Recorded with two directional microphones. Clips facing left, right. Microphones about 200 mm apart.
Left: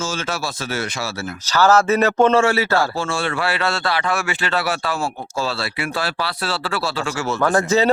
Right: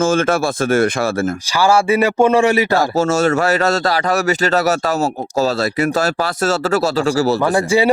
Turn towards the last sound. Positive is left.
turn(degrees=-10)  # may be behind; listen again after turning